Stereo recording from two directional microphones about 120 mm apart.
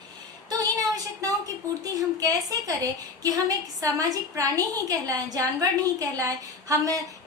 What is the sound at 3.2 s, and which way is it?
A woman's voice, 30° right (ahead or behind).